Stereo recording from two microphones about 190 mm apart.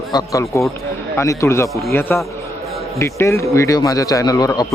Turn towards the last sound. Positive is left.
turn(degrees=20)  # may be behind; listen again after turning